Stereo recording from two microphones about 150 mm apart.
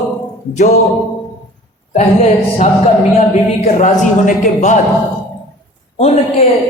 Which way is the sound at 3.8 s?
55° left (ahead or behind).